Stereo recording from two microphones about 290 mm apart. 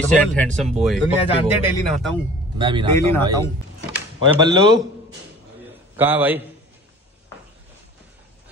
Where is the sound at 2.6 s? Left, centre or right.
Centre.